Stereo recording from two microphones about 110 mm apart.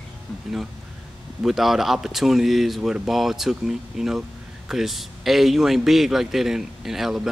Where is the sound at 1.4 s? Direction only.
5° right (ahead or behind).